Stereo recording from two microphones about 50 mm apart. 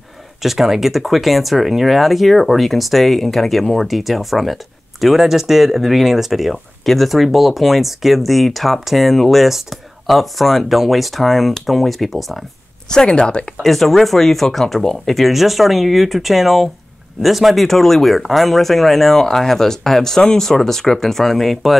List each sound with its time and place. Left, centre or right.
0.4 s speech: centre
12.9 s speech: centre
13.6 s speech: centre